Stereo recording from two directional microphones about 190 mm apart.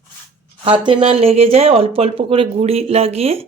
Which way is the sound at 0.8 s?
25° right (ahead or behind).